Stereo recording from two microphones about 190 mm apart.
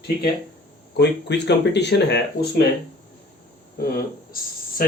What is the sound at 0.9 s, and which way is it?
Speech, 65° left (ahead or behind).